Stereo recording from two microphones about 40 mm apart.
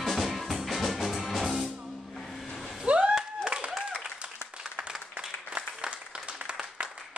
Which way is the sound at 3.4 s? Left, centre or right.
Right.